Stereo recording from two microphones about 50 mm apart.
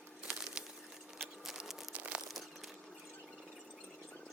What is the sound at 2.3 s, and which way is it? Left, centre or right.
Crumpling, centre.